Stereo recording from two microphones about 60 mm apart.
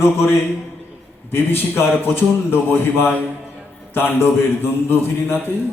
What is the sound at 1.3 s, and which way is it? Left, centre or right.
A man's voice, left.